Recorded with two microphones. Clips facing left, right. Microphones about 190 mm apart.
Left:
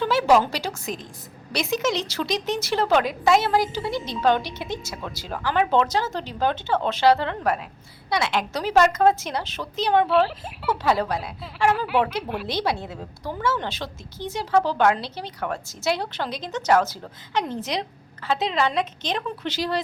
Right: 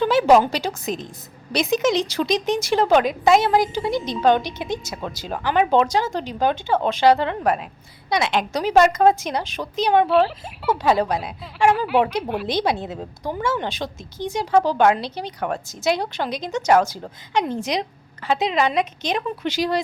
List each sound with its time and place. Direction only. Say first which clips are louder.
0.0 s a woman's voice: right 4 dB; 20° right (ahead or behind)
10.1 s speech: right 2 dB; centre (ahead or behind)
10.8 s a woman's voice: right 3 dB; 20° right (ahead or behind)
11.9 s speech: right 3 dB; centre (ahead or behind)
12.5 s a woman's voice: right 3 dB; 20° right (ahead or behind)